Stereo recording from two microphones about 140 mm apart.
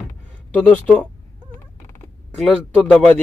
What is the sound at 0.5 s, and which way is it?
Speech, 10° left (ahead or behind).